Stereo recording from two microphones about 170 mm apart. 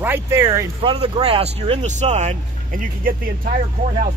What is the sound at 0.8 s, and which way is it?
Speech, 30° right (ahead or behind).